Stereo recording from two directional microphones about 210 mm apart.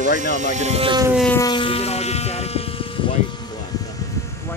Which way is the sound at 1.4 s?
25° left (ahead or behind).